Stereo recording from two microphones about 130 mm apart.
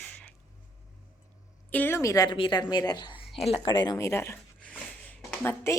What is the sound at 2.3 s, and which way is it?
Speech, 40° left (ahead or behind).